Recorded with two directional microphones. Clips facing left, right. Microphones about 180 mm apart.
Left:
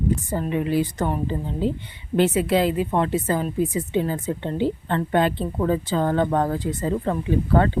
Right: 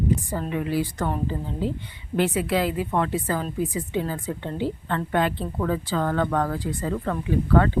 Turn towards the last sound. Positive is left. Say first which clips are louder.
# left 1 dB
turn(degrees=25)  # may be behind; listen again after turning